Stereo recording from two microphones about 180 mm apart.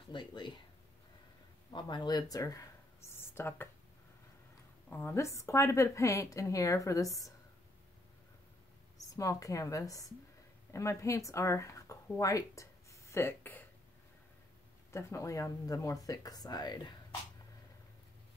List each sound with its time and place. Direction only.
0.1 s speech: 25° left (ahead or behind)
1.7 s a sound: 25° left (ahead or behind)
4.8 s a woman's voice: 10° left (ahead or behind)
9.1 s a woman's voice: 20° left (ahead or behind)
14.9 s speech: 15° left (ahead or behind)